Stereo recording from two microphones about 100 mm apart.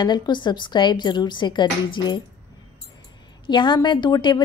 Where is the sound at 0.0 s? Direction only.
50° left (ahead or behind).